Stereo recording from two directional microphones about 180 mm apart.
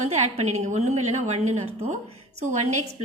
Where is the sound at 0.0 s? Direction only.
40° right (ahead or behind).